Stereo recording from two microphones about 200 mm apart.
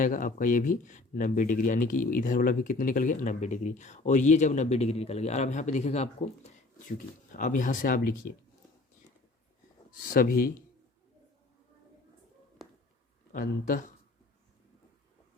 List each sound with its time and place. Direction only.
0.0 s speech: 40° left (ahead or behind)
10.1 s speech: 45° left (ahead or behind)
13.3 s speech: 40° left (ahead or behind)